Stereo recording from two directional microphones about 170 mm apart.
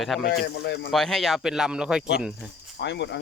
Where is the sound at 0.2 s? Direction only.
65° left (ahead or behind).